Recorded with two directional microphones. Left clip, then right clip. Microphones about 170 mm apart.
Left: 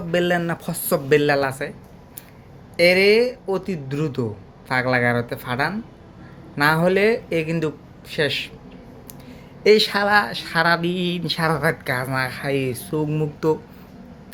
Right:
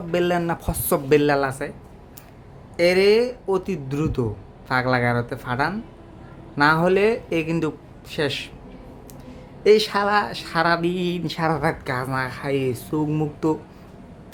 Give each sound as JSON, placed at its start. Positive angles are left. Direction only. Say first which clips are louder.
{"t": 0.1, "sound": "a woman's voice", "louder": "left 1 dB", "side_deg": -10}
{"t": 2.7, "sound": "a woman's voice", "louder": "left 2 dB", "side_deg": -10}
{"t": 9.6, "sound": "a woman's voice", "louder": "left 1 dB", "side_deg": -10}